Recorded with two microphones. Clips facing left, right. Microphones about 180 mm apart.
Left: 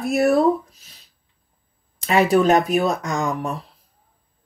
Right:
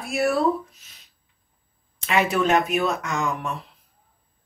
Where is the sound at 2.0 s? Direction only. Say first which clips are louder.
Left 5 dB; 35° left (ahead or behind).